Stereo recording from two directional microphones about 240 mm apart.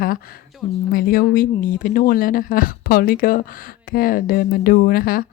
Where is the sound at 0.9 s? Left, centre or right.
Left.